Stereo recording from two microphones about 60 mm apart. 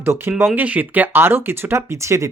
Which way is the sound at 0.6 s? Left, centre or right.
Right.